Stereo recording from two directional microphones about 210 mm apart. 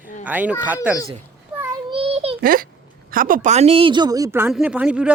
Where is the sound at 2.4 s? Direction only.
45° right (ahead or behind).